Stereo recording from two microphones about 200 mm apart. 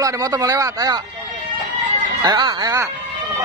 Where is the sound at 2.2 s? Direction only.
20° right (ahead or behind).